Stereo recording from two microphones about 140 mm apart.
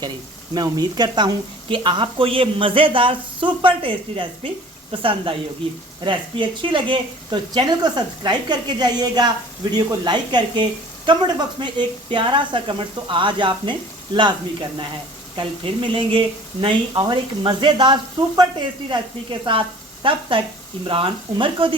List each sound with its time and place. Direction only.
0.5 s speech: 30° right (ahead or behind)
19.5 s speech: 35° right (ahead or behind)